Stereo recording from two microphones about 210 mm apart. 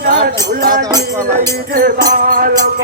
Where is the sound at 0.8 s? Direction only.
15° right (ahead or behind).